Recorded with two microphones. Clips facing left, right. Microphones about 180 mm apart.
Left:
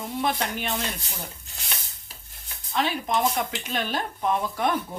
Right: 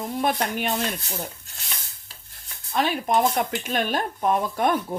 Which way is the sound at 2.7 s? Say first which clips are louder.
Right 3 dB; 50° right (ahead or behind).